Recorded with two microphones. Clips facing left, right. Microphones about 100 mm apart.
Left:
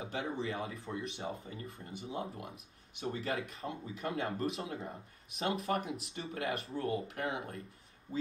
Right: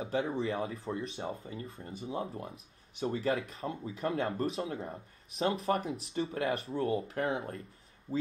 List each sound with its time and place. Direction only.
0.0 s speech: 30° right (ahead or behind)